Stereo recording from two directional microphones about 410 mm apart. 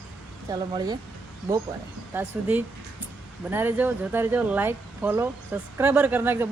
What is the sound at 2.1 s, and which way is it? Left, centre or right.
Speech, centre.